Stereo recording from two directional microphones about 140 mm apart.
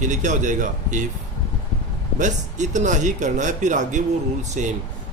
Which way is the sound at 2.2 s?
60° right (ahead or behind).